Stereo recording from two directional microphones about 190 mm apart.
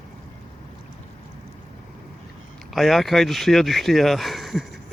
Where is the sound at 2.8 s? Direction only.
Centre (ahead or behind).